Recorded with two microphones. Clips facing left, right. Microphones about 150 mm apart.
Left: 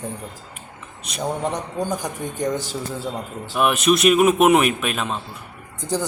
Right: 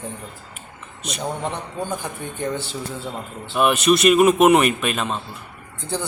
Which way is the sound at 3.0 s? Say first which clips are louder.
Left 2 dB; 10° left (ahead or behind).